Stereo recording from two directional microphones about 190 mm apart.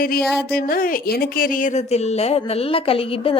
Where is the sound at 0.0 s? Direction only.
50° left (ahead or behind).